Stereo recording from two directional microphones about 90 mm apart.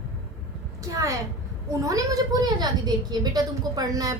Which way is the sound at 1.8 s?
40° right (ahead or behind).